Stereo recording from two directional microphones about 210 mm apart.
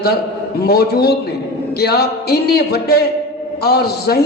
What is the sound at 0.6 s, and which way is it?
A man's voice, 50° left (ahead or behind).